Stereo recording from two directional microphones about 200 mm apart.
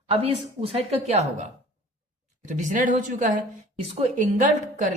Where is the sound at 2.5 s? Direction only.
40° right (ahead or behind).